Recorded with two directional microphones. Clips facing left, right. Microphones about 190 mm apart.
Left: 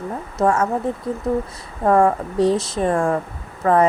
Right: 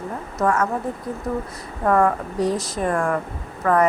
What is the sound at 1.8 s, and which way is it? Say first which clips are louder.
A woman's voice: left 3 dB; 25° left (ahead or behind).